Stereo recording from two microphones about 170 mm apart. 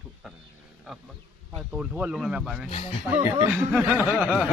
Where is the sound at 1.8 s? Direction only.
5° right (ahead or behind).